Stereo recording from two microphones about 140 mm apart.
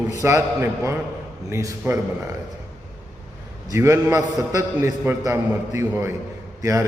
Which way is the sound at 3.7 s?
20° right (ahead or behind).